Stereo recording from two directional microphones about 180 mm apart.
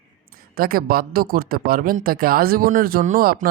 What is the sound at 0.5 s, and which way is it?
A man's voice, 55° right (ahead or behind).